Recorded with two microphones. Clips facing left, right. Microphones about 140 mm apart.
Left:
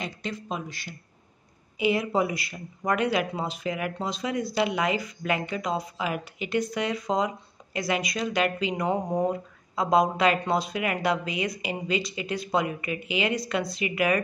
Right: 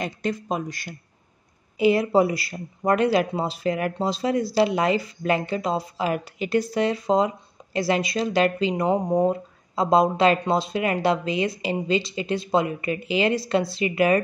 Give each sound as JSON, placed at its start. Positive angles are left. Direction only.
{"t": 0.0, "sound": "speech", "side_deg": -45}
{"t": 1.8, "sound": "speech", "side_deg": -35}